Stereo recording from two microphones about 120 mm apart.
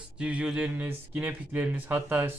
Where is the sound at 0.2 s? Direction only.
10° right (ahead or behind).